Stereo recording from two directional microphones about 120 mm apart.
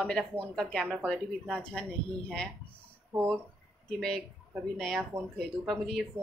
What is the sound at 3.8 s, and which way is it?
A woman's voice, 5° left (ahead or behind).